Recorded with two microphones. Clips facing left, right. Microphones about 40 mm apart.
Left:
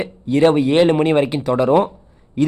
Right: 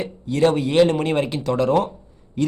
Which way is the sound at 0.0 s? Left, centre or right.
Left.